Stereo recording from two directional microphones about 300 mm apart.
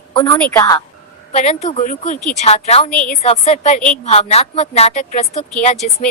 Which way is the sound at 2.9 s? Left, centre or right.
Centre.